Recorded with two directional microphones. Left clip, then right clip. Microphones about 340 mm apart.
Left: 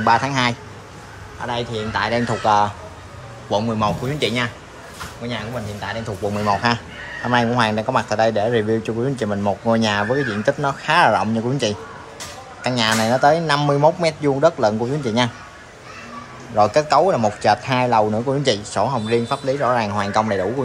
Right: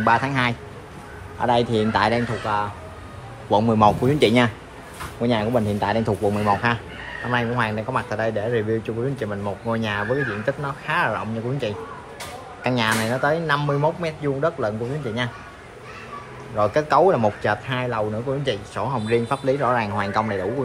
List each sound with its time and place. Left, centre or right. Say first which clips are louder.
0.0 s speech: left 3 dB; centre
3.4 s speech: right 3 dB; centre
16.5 s speech: left 3 dB; centre